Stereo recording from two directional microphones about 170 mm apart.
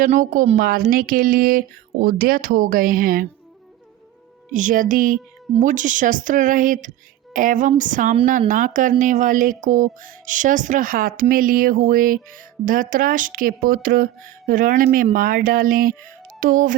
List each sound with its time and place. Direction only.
0.0 s speech: 50° right (ahead or behind)
0.5 s speech: 65° right (ahead or behind)
4.5 s speech: 50° right (ahead or behind)